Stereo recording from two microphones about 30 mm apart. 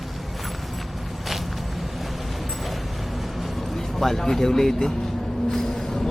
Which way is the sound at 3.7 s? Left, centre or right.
Centre.